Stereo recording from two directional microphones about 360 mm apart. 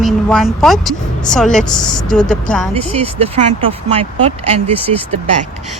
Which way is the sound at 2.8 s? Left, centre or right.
Centre.